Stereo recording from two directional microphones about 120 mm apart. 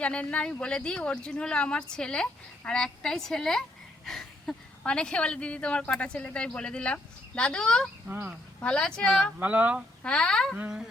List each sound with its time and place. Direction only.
0.0 s a woman's voice: 10° left (ahead or behind)
8.0 s speech: 15° right (ahead or behind)
8.6 s a woman's voice: 5° left (ahead or behind)
9.4 s speech: 15° right (ahead or behind)
10.0 s speech: 5° left (ahead or behind)
10.6 s speech: 5° right (ahead or behind)